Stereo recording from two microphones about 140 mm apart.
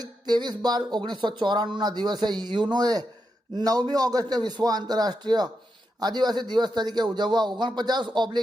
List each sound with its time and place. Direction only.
0.0 s a man's voice: 30° right (ahead or behind)